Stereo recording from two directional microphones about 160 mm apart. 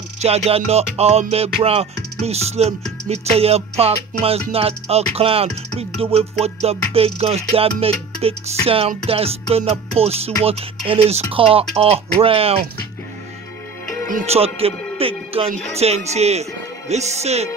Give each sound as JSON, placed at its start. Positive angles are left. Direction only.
{"t": 0.2, "sound": "music", "side_deg": -40}
{"t": 14.2, "sound": "music", "side_deg": -40}